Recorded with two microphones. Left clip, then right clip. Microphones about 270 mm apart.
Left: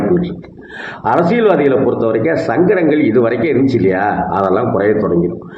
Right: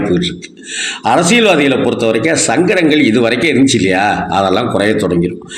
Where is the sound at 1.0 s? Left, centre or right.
Right.